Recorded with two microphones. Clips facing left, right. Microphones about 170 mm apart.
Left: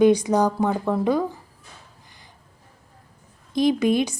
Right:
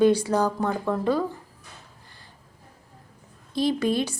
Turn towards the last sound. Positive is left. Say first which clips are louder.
# left 4 dB
turn(degrees=15)  # may be behind; listen again after turning